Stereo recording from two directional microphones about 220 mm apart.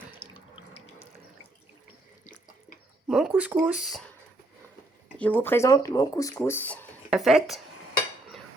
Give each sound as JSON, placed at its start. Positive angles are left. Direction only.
{"t": 0.2, "sound": "water tap", "side_deg": 25}
{"t": 3.1, "sound": "speech", "side_deg": 0}
{"t": 5.1, "sound": "speech", "side_deg": 5}